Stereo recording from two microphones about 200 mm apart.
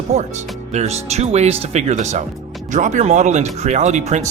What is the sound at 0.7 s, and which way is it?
Speech, 35° right (ahead or behind).